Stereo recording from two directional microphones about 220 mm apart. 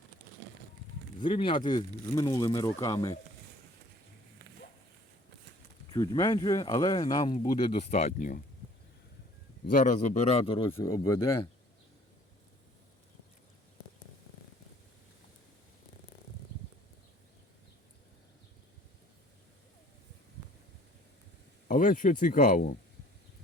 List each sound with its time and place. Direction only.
1.2 s speech: 20° left (ahead or behind)
5.9 s speech: 15° left (ahead or behind); by 8.4 s 35° left (ahead or behind)
9.6 s a man's voice: 35° left (ahead or behind); by 11.2 s 15° left (ahead or behind)
21.7 s a man's voice: 35° left (ahead or behind)